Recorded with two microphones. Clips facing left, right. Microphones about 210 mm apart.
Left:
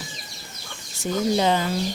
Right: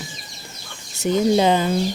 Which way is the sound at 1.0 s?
20° right (ahead or behind).